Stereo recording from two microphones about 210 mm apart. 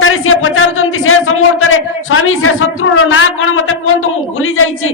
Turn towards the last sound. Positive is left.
turn(degrees=75)  # may be behind; listen again after turning